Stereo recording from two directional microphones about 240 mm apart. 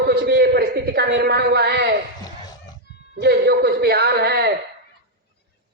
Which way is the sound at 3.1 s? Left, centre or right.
Right.